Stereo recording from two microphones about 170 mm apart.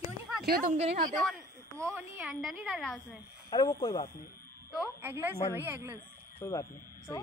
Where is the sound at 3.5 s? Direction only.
25° left (ahead or behind).